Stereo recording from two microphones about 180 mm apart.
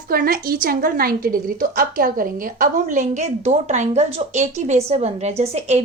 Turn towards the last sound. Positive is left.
turn(degrees=-35)  # may be behind; listen again after turning